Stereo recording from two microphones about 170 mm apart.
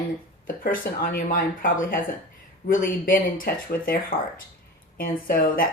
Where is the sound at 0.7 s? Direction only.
55° left (ahead or behind).